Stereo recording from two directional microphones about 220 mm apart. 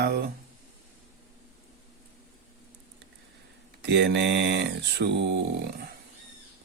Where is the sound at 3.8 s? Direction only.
50° right (ahead or behind).